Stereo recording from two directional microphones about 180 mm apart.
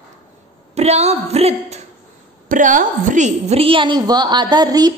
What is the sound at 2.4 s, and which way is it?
A woman's voice, 45° right (ahead or behind).